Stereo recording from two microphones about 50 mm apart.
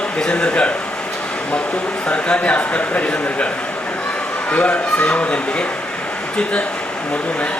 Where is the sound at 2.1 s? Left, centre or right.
Left.